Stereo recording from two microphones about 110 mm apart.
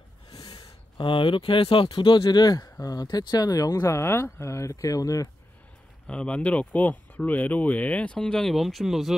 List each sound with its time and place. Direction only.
0.3 s speech: 35° left (ahead or behind)
6.0 s speech: 10° left (ahead or behind)